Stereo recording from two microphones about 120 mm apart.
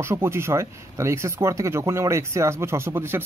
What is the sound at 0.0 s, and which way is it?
Speech, 20° right (ahead or behind).